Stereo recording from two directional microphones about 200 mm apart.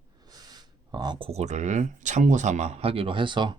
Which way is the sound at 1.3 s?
35° right (ahead or behind).